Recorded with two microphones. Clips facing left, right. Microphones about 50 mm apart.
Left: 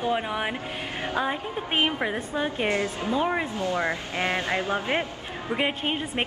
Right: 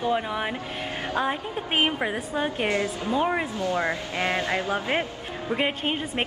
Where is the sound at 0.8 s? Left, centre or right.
Left.